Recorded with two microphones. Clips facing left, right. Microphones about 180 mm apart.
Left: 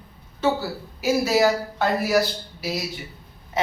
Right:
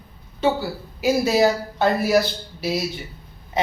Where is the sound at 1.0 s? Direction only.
20° right (ahead or behind).